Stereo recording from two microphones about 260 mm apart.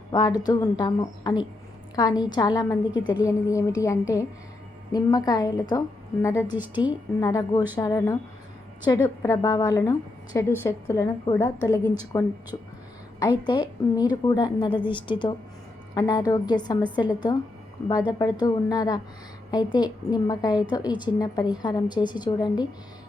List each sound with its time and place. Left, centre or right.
0.1 s a woman's voice: centre
6.6 s a woman's voice: centre
7.2 s a woman's voice: centre
13.4 s a woman's voice: centre